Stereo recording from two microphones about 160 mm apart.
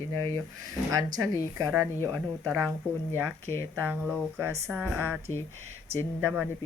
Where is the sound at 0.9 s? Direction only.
20° right (ahead or behind).